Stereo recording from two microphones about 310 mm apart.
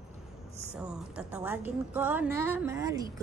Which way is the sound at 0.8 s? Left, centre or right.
Centre.